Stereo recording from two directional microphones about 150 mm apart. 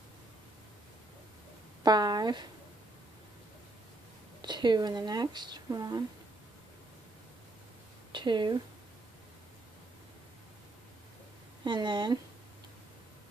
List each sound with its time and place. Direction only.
1.8 s speech: 25° right (ahead or behind)
4.4 s speech: 30° right (ahead or behind)
8.1 s speech: 30° right (ahead or behind)
11.6 s speech: 30° right (ahead or behind)